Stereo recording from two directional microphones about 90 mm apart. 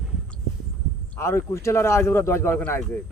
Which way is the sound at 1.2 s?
30° left (ahead or behind).